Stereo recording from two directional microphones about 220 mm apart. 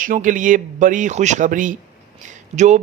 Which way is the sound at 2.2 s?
35° right (ahead or behind).